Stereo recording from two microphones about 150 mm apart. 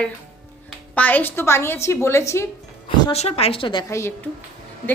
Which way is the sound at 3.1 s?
40° left (ahead or behind).